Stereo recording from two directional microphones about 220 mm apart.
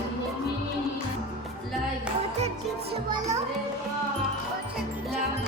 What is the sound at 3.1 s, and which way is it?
Music, 15° right (ahead or behind).